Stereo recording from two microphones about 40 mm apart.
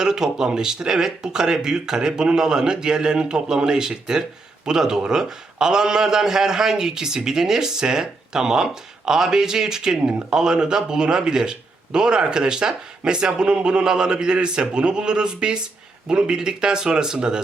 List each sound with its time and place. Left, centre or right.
0.0 s speech: centre